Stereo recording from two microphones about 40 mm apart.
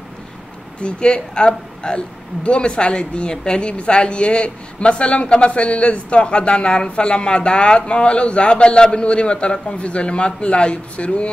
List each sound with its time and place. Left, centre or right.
0.7 s a woman's voice: left